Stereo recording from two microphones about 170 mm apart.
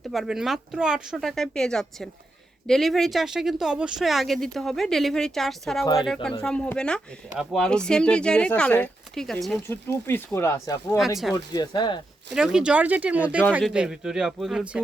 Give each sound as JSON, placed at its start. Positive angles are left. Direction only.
{"t": 0.1, "sound": "speech", "side_deg": 0}
{"t": 5.8, "sound": "speech", "side_deg": 20}
{"t": 6.4, "sound": "speech", "side_deg": 5}
{"t": 9.6, "sound": "speech", "side_deg": 10}
{"t": 12.3, "sound": "speech", "side_deg": -5}